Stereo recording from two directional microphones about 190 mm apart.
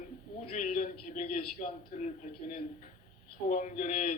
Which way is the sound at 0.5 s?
40° left (ahead or behind).